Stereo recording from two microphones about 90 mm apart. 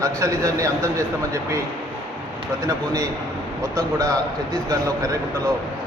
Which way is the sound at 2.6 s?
35° right (ahead or behind).